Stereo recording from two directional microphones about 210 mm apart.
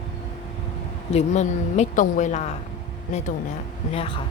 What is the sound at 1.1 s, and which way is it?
Speech, 35° left (ahead or behind).